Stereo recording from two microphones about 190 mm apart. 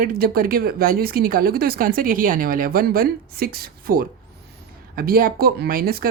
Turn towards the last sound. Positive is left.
turn(degrees=-50)  # may be behind; listen again after turning